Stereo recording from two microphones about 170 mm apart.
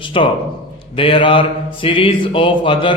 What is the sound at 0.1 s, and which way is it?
A man's voice, 35° left (ahead or behind).